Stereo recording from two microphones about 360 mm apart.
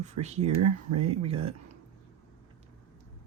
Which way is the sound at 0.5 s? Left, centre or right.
Right.